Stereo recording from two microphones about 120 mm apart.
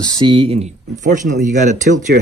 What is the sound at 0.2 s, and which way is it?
Speech, 45° right (ahead or behind).